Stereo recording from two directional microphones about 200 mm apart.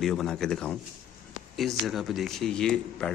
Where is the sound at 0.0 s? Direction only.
Centre (ahead or behind).